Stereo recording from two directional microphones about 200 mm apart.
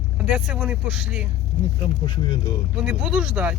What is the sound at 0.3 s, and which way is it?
Speech, 5° right (ahead or behind).